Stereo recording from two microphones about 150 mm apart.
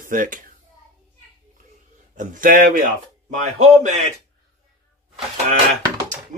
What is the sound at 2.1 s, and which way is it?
Speech, 55° right (ahead or behind).